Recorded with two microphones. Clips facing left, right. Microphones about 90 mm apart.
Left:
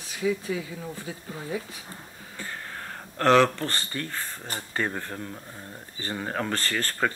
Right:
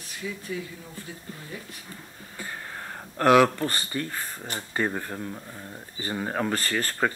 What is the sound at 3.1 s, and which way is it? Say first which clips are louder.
Speech: right 1 dB; 10° right (ahead or behind).